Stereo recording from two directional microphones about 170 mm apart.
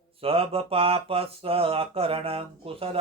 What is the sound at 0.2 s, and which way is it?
Speech, 35° right (ahead or behind).